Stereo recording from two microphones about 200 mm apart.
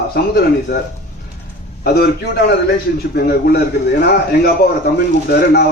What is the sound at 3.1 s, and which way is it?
A man's voice, 50° left (ahead or behind).